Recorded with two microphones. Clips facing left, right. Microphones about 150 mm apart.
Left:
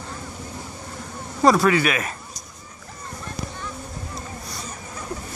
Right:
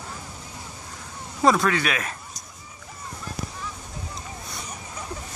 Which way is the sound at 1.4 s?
5° left (ahead or behind).